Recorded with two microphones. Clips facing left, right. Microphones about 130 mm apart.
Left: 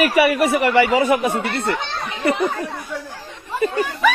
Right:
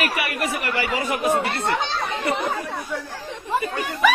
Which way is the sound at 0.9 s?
65° left (ahead or behind).